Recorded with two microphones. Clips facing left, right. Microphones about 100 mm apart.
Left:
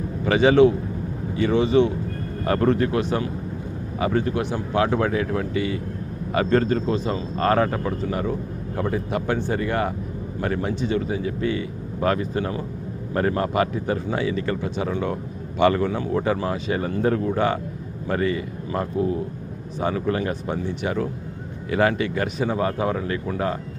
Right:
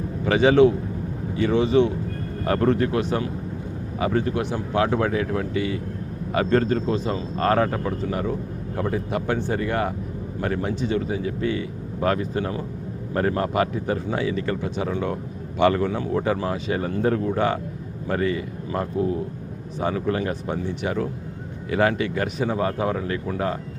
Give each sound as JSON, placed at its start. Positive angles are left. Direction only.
{"t": 0.3, "sound": "a man's voice", "side_deg": 25}